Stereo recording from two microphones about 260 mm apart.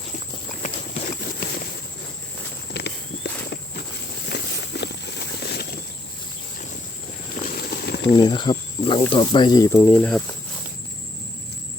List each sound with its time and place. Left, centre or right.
0.6 s horse: left
2.8 s walk: left
4.3 s walk: left
7.4 s a sound: left
8.1 s speech: centre